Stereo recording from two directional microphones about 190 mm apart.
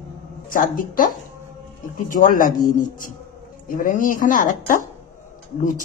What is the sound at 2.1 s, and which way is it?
A woman's voice, 45° left (ahead or behind).